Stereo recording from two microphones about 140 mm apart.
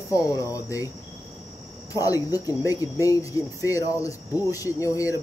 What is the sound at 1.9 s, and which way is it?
Speech, 25° left (ahead or behind).